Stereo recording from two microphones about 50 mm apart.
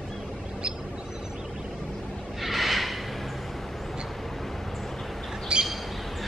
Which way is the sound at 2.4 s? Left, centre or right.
Centre.